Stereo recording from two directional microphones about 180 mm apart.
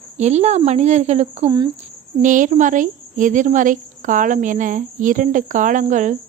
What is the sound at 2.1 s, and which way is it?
Speech, 45° right (ahead or behind).